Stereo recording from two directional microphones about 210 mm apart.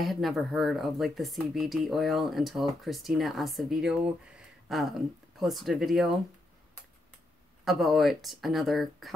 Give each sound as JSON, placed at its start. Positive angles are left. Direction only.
{"t": 0.0, "sound": "speech", "side_deg": 0}
{"t": 7.6, "sound": "speech", "side_deg": 0}